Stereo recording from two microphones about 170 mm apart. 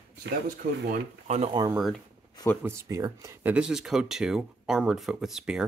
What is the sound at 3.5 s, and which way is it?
Speech, 5° right (ahead or behind).